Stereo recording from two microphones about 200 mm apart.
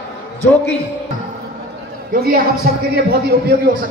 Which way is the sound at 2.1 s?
45° right (ahead or behind).